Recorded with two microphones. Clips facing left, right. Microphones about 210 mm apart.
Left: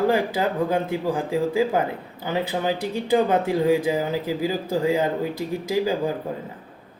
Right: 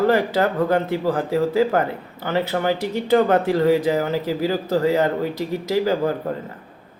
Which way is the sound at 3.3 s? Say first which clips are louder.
Right 3 dB; 10° left (ahead or behind).